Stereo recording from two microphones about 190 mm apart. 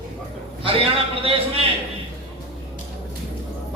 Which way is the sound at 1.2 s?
30° right (ahead or behind).